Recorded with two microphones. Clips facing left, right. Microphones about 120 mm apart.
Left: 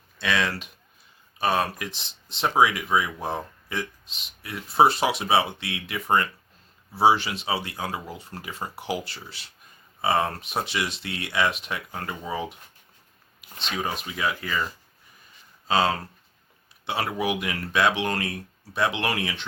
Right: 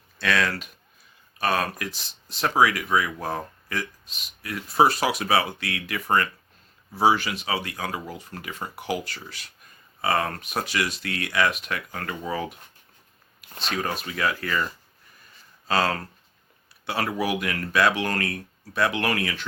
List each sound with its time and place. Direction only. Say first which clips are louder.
0.2 s speech: right 1 dB; 20° left (ahead or behind)
14.1 s speech: right 2 dB; 10° left (ahead or behind)